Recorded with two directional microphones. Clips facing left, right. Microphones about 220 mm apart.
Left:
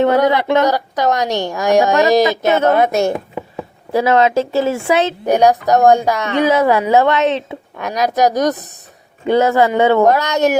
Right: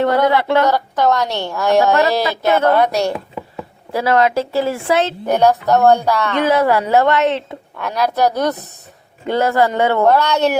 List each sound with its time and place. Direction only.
0.0 s a woman's voice: 15° left (ahead or behind)
3.9 s a woman's voice: 20° left (ahead or behind)